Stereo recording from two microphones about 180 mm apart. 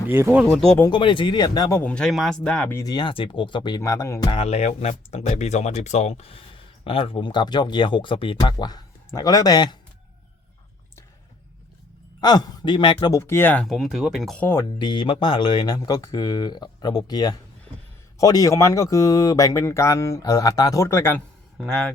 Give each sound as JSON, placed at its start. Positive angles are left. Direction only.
{"t": 0.1, "sound": "speech", "side_deg": -10}
{"t": 0.4, "sound": "speech", "side_deg": 5}
{"t": 0.9, "sound": "speech", "side_deg": 25}
{"t": 1.8, "sound": "speech", "side_deg": 5}
{"t": 12.2, "sound": "speech", "side_deg": 20}
{"t": 14.4, "sound": "speech", "side_deg": 15}
{"t": 14.8, "sound": "speech", "side_deg": 25}